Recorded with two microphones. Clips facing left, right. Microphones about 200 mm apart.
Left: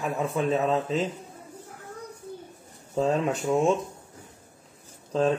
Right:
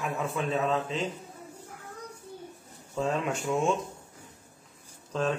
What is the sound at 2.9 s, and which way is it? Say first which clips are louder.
Speech: left 5 dB; 35° left (ahead or behind).